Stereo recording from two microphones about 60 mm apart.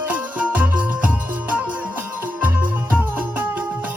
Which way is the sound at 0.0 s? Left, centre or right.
Right.